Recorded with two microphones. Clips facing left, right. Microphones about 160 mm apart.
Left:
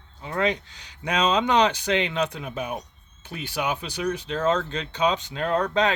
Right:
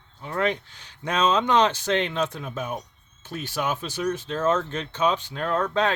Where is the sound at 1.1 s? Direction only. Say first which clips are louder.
Even; 15° left (ahead or behind).